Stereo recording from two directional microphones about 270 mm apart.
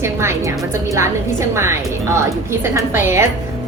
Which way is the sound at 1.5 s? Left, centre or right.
Centre.